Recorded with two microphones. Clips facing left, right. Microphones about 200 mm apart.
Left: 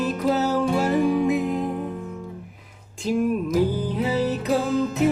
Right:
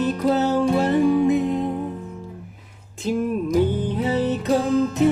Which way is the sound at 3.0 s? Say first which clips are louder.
Even; centre (ahead or behind).